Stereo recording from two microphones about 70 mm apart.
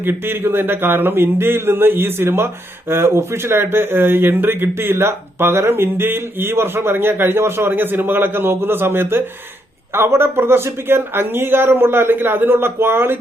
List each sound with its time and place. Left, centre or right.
0.0 s speech: right